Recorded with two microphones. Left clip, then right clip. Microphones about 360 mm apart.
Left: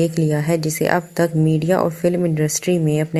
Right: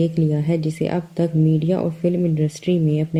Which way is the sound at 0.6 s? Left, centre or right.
Centre.